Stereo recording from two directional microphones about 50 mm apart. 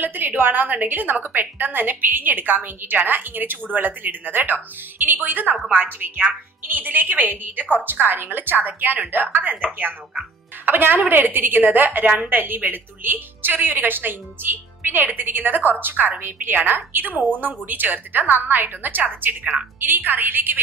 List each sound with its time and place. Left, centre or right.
0.0 s a woman's voice: right